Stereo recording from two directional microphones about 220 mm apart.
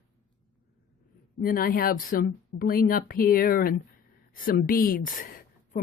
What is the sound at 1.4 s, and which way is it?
A woman's voice, 40° left (ahead or behind).